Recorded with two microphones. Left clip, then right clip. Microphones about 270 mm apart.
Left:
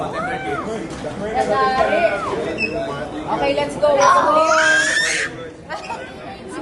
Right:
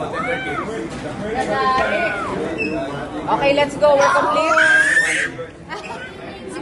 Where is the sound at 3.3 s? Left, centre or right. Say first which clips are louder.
Right 3 dB; right.